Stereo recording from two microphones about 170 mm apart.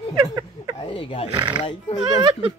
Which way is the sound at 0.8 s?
35° left (ahead or behind).